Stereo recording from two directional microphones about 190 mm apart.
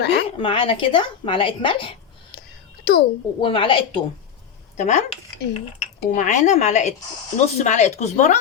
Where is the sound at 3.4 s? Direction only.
25° left (ahead or behind).